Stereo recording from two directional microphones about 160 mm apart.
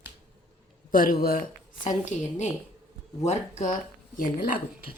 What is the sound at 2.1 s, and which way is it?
Speech, 50° left (ahead or behind).